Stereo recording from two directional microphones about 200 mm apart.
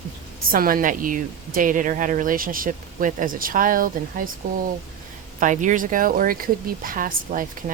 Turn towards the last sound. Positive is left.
turn(degrees=-45)  # may be behind; listen again after turning